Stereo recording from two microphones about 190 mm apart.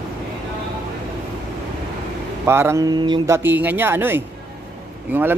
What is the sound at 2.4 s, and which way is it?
Speech, 15° right (ahead or behind).